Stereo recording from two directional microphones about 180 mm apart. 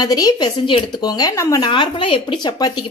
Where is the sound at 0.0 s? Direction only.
20° left (ahead or behind).